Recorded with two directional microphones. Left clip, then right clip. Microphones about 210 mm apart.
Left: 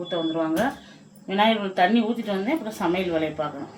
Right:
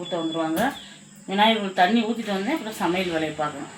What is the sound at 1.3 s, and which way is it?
Speech, 20° left (ahead or behind).